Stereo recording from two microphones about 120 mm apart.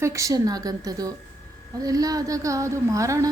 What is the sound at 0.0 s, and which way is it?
A woman's voice, 25° right (ahead or behind).